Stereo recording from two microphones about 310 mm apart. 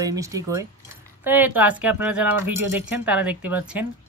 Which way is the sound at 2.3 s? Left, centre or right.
Right.